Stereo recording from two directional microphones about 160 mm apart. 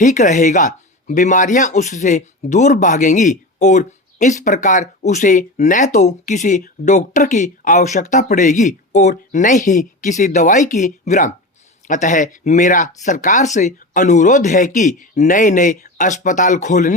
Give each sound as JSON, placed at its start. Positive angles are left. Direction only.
{"t": 0.0, "sound": "speech", "side_deg": 50}